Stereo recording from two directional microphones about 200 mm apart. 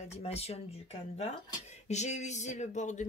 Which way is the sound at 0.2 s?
30° left (ahead or behind).